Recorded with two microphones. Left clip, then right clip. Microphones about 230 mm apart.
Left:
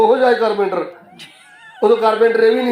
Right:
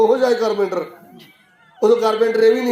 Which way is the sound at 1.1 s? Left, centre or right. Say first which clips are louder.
Left 7 dB; left.